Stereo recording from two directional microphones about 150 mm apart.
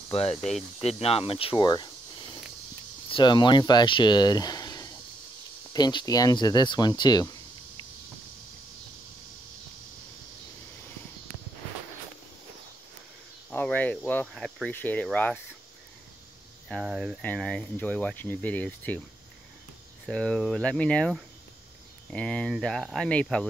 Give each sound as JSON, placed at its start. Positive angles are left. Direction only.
{"t": 0.1, "sound": "speech", "side_deg": 40}
{"t": 0.4, "sound": "speech", "side_deg": 0}
{"t": 0.7, "sound": "speech", "side_deg": 40}
{"t": 13.5, "sound": "speech", "side_deg": 10}
{"t": 16.6, "sound": "speech", "side_deg": 0}
{"t": 20.1, "sound": "speech", "side_deg": 5}